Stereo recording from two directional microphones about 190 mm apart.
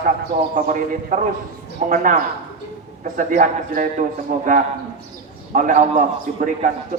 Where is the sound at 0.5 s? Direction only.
40° right (ahead or behind).